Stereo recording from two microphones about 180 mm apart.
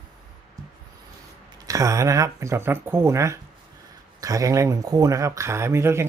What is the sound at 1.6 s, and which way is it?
Speech, 20° right (ahead or behind).